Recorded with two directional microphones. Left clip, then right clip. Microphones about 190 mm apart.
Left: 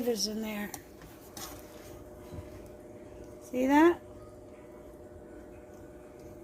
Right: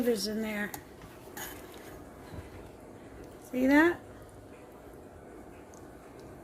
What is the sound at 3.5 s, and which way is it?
Speech, 10° left (ahead or behind).